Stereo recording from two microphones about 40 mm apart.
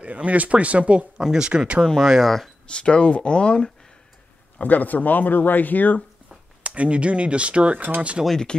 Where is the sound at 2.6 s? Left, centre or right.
Left.